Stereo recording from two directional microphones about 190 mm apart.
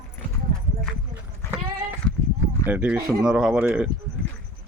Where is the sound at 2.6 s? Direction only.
10° right (ahead or behind).